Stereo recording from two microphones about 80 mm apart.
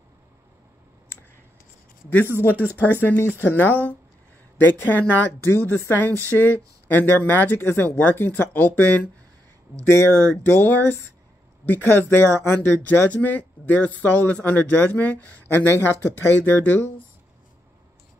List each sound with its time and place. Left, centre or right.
2.8 s speech: left
9.8 s speech: left